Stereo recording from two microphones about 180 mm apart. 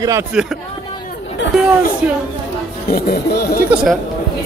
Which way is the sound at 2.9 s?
60° left (ahead or behind).